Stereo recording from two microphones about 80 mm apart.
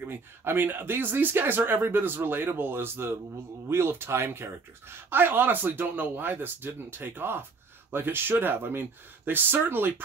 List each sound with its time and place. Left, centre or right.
0.0 s speech: right